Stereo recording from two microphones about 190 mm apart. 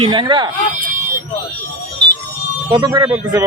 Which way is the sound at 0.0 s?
25° right (ahead or behind).